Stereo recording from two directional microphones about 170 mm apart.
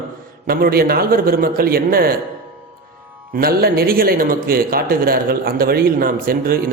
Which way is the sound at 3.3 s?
60° right (ahead or behind).